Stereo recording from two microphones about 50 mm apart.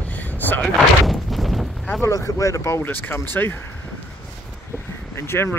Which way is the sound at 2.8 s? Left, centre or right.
Left.